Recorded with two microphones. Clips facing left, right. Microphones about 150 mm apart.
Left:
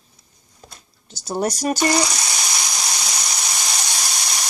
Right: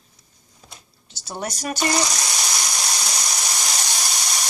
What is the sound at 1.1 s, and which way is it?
Speech, 45° left (ahead or behind).